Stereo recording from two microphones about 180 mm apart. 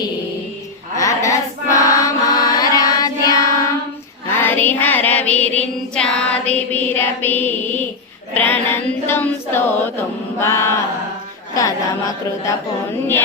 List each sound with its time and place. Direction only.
0.9 s mantra: 20° left (ahead or behind)
4.3 s child singing: 10° left (ahead or behind)
6.5 s a sound: 10° left (ahead or behind)
11.5 s a woman's voice: 20° left (ahead or behind)